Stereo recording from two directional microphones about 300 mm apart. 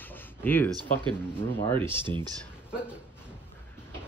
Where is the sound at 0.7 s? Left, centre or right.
Centre.